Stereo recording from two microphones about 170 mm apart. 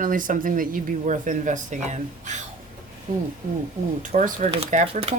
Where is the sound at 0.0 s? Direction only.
55° right (ahead or behind).